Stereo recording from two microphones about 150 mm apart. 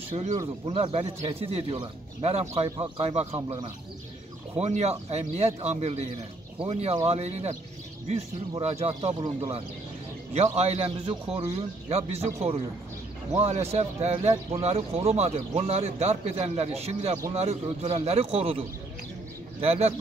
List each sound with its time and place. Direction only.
0.1 s speech: 40° right (ahead or behind)
4.6 s speech: 45° right (ahead or behind)
10.3 s speech: 45° right (ahead or behind)
13.4 s speech: 45° right (ahead or behind)